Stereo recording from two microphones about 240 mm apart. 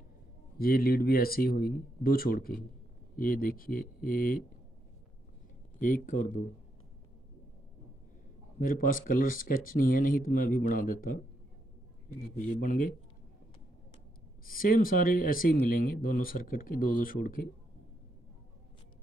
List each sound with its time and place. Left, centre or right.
0.6 s speech: left
5.8 s speech: left
8.5 s speech: left
12.2 s speech: left
14.4 s speech: left